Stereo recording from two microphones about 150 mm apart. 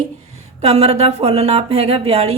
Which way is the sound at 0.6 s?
40° right (ahead or behind).